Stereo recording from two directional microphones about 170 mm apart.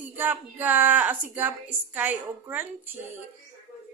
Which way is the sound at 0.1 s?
10° right (ahead or behind).